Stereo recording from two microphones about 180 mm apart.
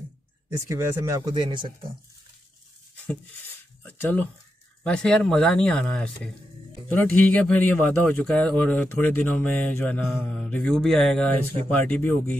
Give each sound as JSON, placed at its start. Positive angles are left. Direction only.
{"t": 0.5, "sound": "speech", "side_deg": -15}
{"t": 3.8, "sound": "speech", "side_deg": 10}